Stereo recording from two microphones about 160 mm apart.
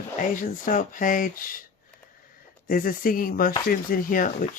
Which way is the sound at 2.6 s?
60° left (ahead or behind).